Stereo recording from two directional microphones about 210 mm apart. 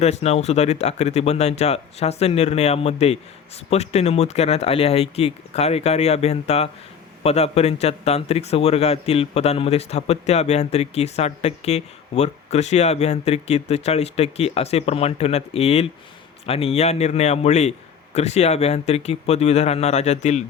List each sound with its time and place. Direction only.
0.0 s a man's voice: 30° left (ahead or behind)